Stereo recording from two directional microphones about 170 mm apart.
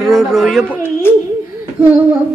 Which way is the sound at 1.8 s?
10° right (ahead or behind).